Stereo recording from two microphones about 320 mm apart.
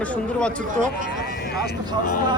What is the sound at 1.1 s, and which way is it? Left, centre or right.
Vehicle, left.